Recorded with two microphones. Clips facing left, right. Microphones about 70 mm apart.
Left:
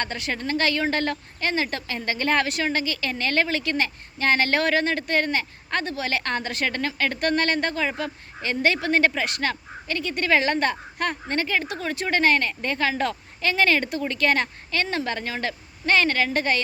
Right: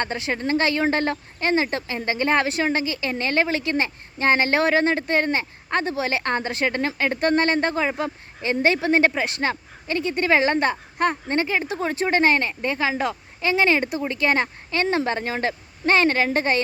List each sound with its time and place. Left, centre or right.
0.0 s a woman's voice: right